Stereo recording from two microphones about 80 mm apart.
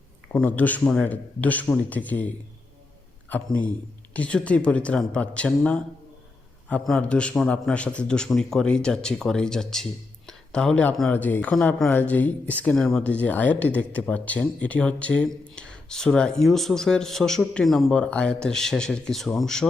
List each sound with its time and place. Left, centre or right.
0.3 s a man's voice: centre
7.0 s speech: centre
10.2 s a sound: centre
11.1 s a man's voice: left
12.7 s speech: centre
13.0 s speech: centre
18.0 s speech: centre